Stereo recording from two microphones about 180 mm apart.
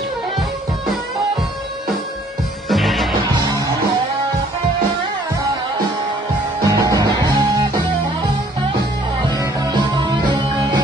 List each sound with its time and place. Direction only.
2.7 s music: centre (ahead or behind)
3.3 s music: 20° right (ahead or behind)
6.6 s music: 20° right (ahead or behind)
9.3 s music: 20° right (ahead or behind)